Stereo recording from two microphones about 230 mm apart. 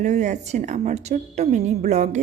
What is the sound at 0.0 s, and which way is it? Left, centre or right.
A woman's voice, right.